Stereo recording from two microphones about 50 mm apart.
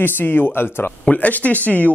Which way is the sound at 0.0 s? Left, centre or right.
Left.